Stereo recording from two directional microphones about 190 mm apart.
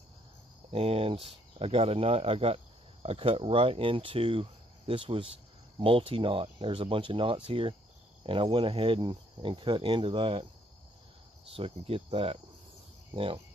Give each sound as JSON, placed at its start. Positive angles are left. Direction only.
{"t": 0.7, "sound": "speech", "side_deg": -30}
{"t": 11.5, "sound": "speech", "side_deg": -30}